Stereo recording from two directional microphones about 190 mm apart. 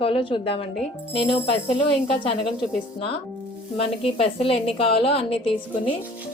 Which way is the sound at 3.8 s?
30° left (ahead or behind).